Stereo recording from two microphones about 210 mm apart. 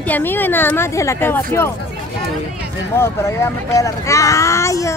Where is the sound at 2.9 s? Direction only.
15° left (ahead or behind).